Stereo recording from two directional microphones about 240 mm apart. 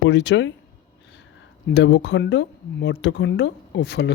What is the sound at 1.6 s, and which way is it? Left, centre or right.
Speech, left.